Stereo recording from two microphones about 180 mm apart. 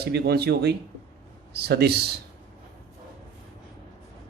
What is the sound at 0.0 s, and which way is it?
A man's voice, 65° right (ahead or behind).